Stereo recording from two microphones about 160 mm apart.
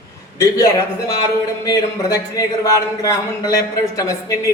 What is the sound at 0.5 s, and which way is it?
Speech, 20° left (ahead or behind).